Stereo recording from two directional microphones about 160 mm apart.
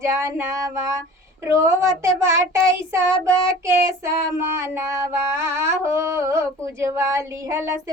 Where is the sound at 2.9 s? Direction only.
15° right (ahead or behind).